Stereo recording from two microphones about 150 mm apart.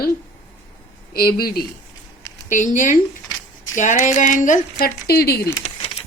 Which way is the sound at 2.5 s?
55° left (ahead or behind).